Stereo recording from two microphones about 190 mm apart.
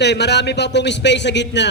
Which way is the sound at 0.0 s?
60° left (ahead or behind).